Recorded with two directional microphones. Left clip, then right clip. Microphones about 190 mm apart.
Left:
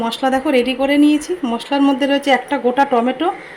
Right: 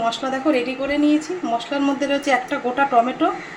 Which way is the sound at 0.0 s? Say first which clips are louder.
Left 4 dB; 50° left (ahead or behind).